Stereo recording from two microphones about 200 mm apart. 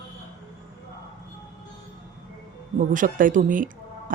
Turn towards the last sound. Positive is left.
turn(degrees=-40)  # may be behind; listen again after turning